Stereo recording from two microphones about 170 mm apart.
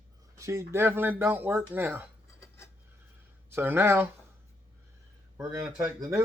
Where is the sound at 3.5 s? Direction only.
15° right (ahead or behind).